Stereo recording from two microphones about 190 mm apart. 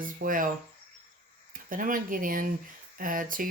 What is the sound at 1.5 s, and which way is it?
Speech, 45° right (ahead or behind).